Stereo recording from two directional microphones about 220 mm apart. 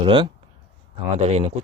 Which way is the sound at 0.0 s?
20° right (ahead or behind).